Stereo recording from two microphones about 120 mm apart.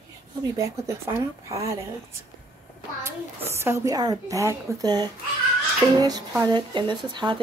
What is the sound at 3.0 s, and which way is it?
A woman's voice, 20° right (ahead or behind).